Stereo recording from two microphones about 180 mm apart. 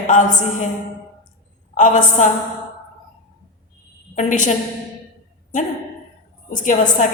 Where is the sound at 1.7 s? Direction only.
45° left (ahead or behind).